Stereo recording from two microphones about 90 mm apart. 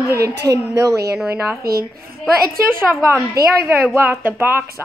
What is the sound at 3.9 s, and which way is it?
Speech, 25° right (ahead or behind).